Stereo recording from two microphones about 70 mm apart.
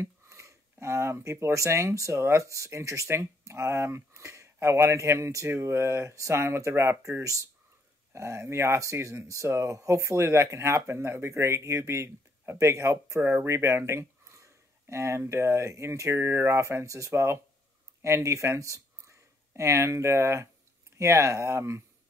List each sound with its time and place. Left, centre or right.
0.0 s speech: right
13.2 s speech: right
13.5 s speech: right